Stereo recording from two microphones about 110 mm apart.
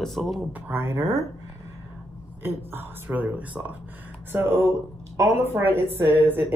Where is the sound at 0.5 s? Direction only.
20° right (ahead or behind).